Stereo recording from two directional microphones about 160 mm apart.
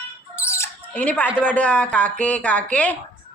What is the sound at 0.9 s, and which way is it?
Speech, 10° left (ahead or behind).